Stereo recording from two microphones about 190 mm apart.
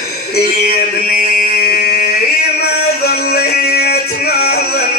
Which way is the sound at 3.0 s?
55° left (ahead or behind).